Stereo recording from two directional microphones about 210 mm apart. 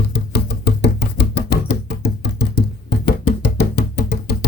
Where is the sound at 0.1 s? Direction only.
50° left (ahead or behind).